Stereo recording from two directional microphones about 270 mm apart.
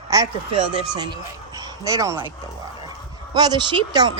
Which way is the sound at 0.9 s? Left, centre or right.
Centre.